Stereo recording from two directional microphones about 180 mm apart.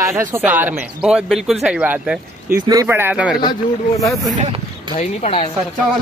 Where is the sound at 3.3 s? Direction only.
20° left (ahead or behind).